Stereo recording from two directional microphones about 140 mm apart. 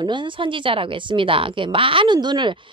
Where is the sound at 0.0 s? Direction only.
35° right (ahead or behind).